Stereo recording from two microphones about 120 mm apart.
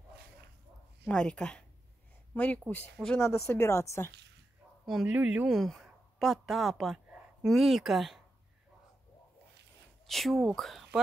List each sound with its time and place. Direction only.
1.0 s speech: 10° left (ahead or behind)
3.3 s speech: 20° left (ahead or behind)
4.8 s a man's voice: 5° right (ahead or behind)
5.6 s speech: centre (ahead or behind)
10.0 s speech: centre (ahead or behind)